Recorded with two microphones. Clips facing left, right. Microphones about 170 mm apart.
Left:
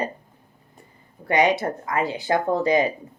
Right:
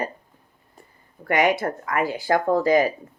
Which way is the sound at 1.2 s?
20° left (ahead or behind).